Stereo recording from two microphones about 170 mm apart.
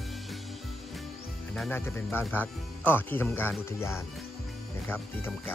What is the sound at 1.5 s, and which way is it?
Speech, 10° left (ahead or behind).